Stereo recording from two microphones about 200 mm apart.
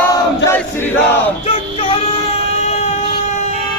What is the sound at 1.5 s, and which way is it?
Music, 30° left (ahead or behind).